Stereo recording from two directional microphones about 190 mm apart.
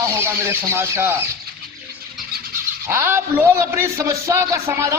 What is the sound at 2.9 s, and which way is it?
Speech, 15° right (ahead or behind).